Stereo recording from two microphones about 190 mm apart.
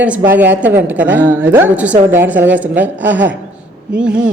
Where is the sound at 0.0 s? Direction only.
10° right (ahead or behind).